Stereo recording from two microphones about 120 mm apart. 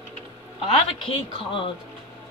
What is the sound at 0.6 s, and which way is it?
A man's voice, 50° left (ahead or behind).